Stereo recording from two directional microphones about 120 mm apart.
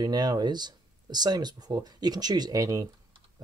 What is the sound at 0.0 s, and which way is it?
Speech, 35° right (ahead or behind).